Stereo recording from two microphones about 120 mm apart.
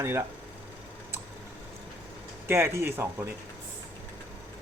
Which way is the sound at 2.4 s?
20° right (ahead or behind).